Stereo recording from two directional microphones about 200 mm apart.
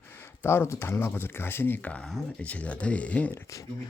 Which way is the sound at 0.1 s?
10° left (ahead or behind).